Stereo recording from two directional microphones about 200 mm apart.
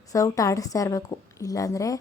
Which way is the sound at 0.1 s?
15° left (ahead or behind).